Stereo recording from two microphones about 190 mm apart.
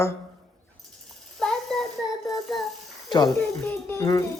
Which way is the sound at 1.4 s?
Centre (ahead or behind).